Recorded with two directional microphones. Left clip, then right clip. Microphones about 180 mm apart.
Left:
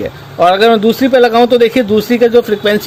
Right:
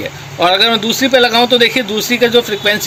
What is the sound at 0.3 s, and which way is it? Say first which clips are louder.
Speech: left 3 dB; 50° left (ahead or behind).